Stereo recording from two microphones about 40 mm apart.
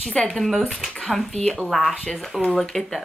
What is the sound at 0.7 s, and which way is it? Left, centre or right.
Speech, centre.